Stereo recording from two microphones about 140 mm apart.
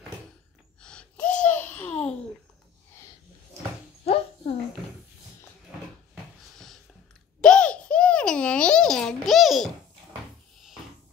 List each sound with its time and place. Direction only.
0.7 s babbling: 5° left (ahead or behind)
4.0 s a sound: 45° left (ahead or behind)
7.4 s babbling: 5° left (ahead or behind)